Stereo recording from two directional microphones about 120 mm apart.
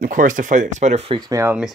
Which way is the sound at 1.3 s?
25° right (ahead or behind).